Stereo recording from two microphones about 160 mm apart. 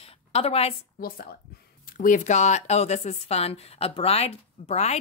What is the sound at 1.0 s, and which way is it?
Speech, 65° left (ahead or behind).